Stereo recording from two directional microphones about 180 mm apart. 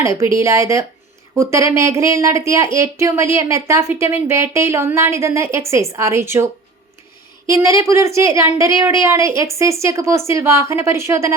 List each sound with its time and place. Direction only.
0.0 s speech: 15° right (ahead or behind)